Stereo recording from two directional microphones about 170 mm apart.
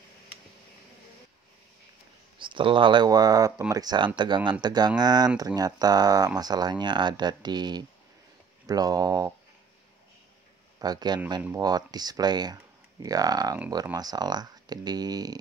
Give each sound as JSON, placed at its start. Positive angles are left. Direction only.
{"t": 2.3, "sound": "speech", "side_deg": -30}
{"t": 10.8, "sound": "speech", "side_deg": -25}